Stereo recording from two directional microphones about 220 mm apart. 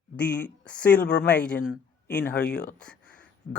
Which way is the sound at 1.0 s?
50° left (ahead or behind).